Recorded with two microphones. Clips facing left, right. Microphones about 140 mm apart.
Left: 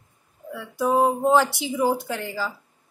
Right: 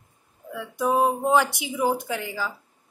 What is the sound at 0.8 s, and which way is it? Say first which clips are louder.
A woman's voice: left 2 dB; 5° right (ahead or behind).